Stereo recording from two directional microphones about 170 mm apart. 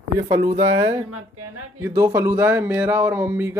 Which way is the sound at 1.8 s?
15° right (ahead or behind).